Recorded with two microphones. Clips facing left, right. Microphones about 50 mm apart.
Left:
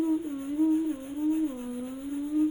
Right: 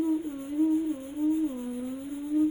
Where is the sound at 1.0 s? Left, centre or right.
Left.